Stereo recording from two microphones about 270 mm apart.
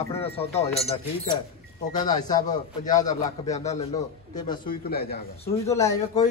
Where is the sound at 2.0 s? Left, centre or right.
Centre.